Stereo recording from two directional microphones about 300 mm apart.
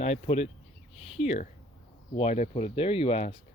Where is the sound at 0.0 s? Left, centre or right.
Left.